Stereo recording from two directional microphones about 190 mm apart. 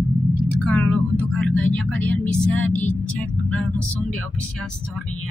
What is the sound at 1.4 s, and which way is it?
Speech, 75° right (ahead or behind).